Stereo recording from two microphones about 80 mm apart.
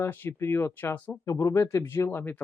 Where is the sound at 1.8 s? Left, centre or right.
Left.